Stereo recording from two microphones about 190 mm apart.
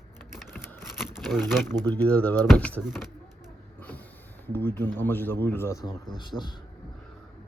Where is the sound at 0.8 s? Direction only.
Centre (ahead or behind).